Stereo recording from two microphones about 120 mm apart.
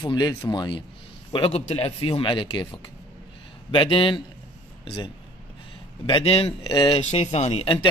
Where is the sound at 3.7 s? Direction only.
45° left (ahead or behind).